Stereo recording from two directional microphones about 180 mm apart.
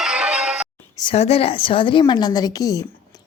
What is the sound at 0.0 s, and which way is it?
Music, 5° right (ahead or behind).